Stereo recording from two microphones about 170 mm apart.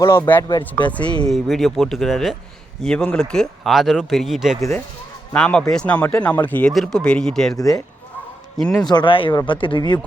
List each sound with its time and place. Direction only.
0.0 s speech: 15° left (ahead or behind)
7.5 s speech: 20° left (ahead or behind)
8.5 s speech: centre (ahead or behind)
8.9 s speech: 30° left (ahead or behind)